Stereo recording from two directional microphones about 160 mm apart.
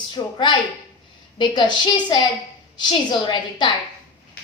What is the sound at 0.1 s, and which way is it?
A woman's voice, 30° left (ahead or behind).